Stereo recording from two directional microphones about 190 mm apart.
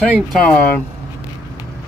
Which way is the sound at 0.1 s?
5° left (ahead or behind).